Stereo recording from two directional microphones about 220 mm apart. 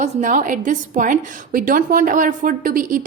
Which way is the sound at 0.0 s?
35° right (ahead or behind).